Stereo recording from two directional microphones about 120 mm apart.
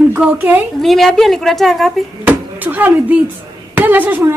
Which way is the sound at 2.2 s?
15° right (ahead or behind).